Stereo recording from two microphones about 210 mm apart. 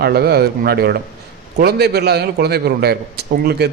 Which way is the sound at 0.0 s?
50° right (ahead or behind).